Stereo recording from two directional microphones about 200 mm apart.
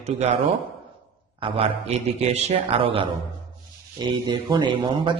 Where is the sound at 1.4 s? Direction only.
30° right (ahead or behind).